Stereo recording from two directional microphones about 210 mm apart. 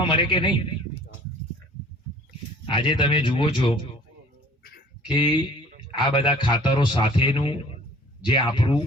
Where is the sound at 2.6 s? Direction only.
25° left (ahead or behind).